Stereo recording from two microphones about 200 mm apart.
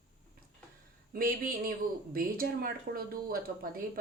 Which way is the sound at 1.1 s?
45° right (ahead or behind).